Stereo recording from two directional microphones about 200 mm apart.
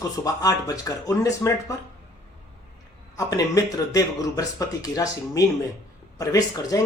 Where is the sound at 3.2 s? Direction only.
20° left (ahead or behind).